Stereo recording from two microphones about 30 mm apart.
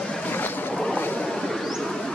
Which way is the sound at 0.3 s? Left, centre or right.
Left.